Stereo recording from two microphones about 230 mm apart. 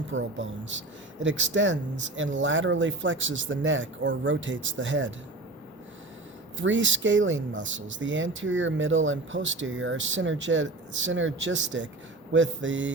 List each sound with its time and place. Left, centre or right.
0.1 s speech: right
6.6 s speech: right
12.3 s mantra: right